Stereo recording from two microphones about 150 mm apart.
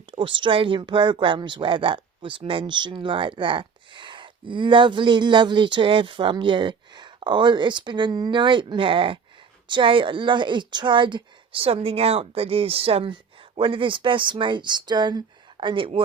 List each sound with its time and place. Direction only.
0.1 s speech: 35° right (ahead or behind)